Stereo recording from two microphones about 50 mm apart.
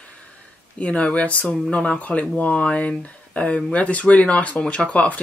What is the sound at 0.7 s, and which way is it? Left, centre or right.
Speech, left.